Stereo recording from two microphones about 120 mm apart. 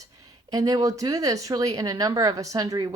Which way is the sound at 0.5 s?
30° right (ahead or behind).